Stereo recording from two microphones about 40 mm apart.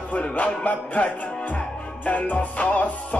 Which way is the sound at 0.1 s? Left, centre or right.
Left.